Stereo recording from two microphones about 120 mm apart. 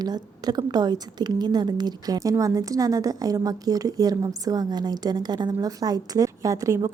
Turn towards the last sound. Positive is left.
turn(degrees=-30)  # may be behind; listen again after turning